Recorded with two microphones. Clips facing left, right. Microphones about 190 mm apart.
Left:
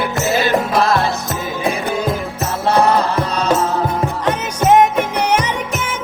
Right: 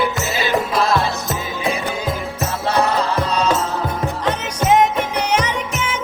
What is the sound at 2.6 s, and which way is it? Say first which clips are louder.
Music: left 4 dB; 55° left (ahead or behind).